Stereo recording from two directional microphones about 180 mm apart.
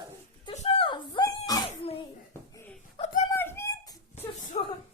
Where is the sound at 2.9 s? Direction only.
40° left (ahead or behind).